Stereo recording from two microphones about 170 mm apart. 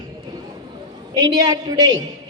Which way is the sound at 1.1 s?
25° right (ahead or behind).